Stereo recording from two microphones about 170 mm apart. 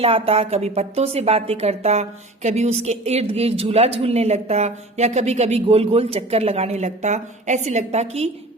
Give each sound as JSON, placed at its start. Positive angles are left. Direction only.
{"t": 0.0, "sound": "a woman's voice", "side_deg": -35}